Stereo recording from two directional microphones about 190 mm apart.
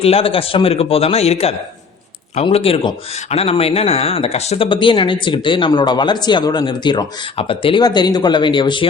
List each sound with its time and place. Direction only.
0.0 s speech: 30° left (ahead or behind)